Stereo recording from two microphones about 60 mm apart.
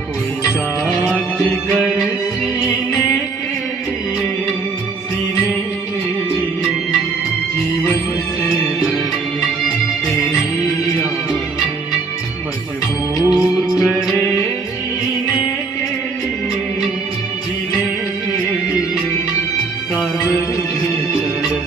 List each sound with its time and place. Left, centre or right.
0.5 s music: centre
13.2 s music: right